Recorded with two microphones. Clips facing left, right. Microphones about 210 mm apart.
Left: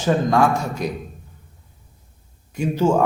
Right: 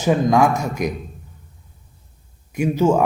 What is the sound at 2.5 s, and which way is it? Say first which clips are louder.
Speech: right 2 dB; 10° right (ahead or behind).